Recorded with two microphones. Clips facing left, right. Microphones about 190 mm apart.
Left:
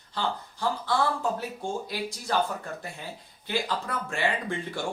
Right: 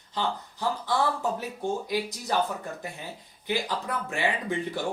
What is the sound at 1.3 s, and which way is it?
Speech, 15° right (ahead or behind).